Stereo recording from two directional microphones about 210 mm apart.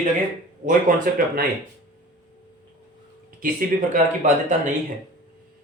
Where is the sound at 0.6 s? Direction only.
40° right (ahead or behind).